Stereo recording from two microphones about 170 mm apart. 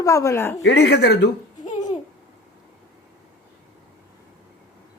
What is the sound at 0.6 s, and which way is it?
Speech, 80° left.